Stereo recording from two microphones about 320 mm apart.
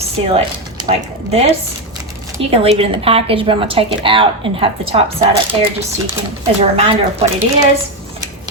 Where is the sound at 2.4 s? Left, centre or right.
Centre.